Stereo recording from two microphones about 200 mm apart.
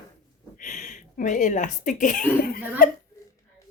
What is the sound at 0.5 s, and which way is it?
Speech, 40° left (ahead or behind).